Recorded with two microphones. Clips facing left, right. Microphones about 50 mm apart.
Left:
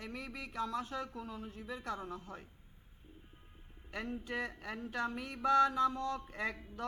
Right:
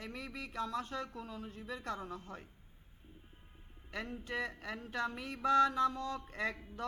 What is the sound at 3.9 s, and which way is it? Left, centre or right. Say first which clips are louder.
A man's voice: left 1 dB; left.